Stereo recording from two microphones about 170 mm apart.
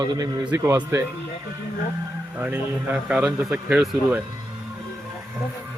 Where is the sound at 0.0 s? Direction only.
20° right (ahead or behind).